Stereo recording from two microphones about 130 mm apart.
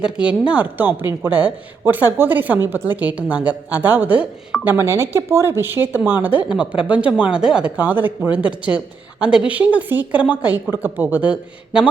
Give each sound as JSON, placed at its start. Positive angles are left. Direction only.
{"t": 0.2, "sound": "a woman's voice", "side_deg": -10}